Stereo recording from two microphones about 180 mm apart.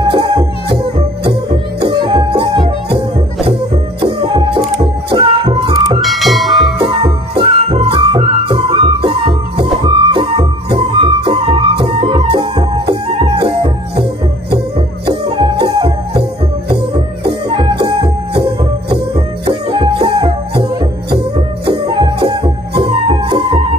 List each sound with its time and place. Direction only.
0.1 s music: 25° right (ahead or behind)
5.9 s music: centre (ahead or behind)
6.8 s music: 25° right (ahead or behind)
15.0 s music: 25° right (ahead or behind)